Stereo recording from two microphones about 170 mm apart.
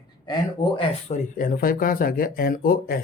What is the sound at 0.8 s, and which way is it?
Speech, 40° left (ahead or behind).